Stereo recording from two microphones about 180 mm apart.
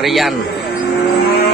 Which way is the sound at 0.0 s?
Centre (ahead or behind).